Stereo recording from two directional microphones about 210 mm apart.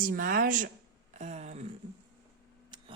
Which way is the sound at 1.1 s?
35° right (ahead or behind).